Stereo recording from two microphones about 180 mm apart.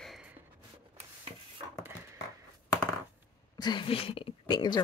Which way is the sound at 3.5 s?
25° left (ahead or behind).